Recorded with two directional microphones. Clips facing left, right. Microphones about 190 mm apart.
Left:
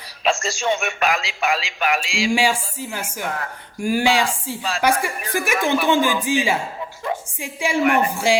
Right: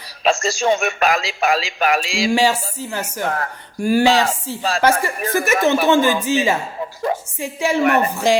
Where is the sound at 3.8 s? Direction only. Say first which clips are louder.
Right 5 dB; 15° left (ahead or behind).